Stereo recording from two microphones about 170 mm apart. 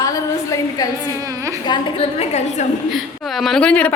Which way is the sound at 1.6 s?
25° left (ahead or behind).